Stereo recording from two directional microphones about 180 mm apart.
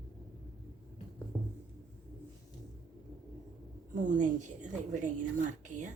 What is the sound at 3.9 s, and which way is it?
Speech, 45° right (ahead or behind).